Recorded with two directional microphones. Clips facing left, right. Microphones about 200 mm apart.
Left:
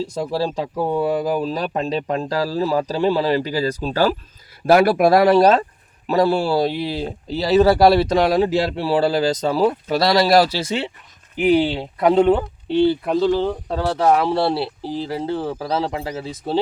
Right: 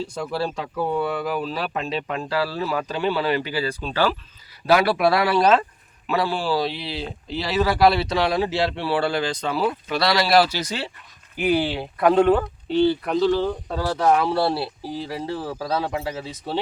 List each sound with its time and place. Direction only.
0.0 s speech: 35° left (ahead or behind)
10.6 s speech: 25° left (ahead or behind)